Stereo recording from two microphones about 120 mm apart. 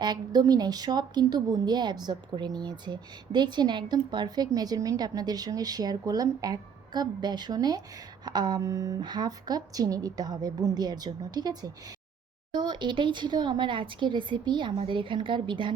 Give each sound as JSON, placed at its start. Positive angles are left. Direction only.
{"t": 0.0, "sound": "a woman's voice", "side_deg": -35}